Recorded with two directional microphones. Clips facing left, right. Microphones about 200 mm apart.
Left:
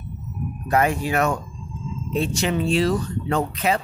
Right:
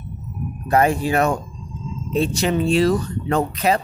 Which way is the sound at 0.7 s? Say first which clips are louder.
Right 3 dB; 30° right (ahead or behind).